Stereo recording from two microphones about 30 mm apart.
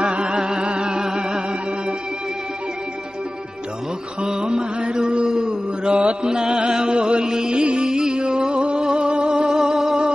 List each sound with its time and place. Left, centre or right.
0.0 s music: right
4.2 s mantra: right
5.9 s mantra: right
6.2 s music: right